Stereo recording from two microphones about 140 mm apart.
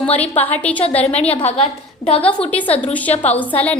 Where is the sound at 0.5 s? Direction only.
10° left (ahead or behind).